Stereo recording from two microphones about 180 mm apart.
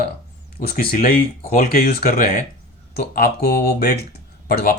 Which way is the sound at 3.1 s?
60° left (ahead or behind).